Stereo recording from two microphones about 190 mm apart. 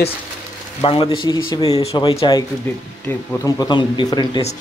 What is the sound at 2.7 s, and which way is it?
Speech, 10° left (ahead or behind).